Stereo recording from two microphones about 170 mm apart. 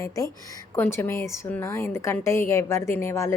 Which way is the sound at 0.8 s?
15° left (ahead or behind).